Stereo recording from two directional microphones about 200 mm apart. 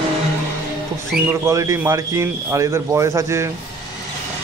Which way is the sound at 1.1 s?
15° right (ahead or behind).